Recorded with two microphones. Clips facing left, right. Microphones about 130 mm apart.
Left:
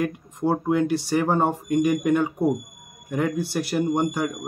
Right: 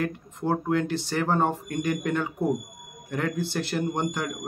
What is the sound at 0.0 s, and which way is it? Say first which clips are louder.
Speech: left 4 dB; 10° left (ahead or behind).